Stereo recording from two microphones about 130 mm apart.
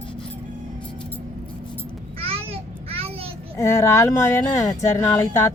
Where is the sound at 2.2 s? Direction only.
50° right (ahead or behind).